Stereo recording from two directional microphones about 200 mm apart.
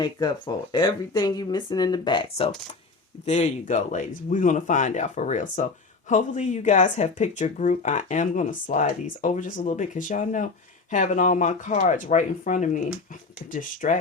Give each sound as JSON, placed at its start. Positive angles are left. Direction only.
{"t": 0.0, "sound": "speech", "side_deg": 20}